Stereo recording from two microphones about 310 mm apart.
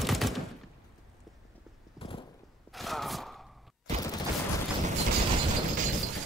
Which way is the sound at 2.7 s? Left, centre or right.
Centre.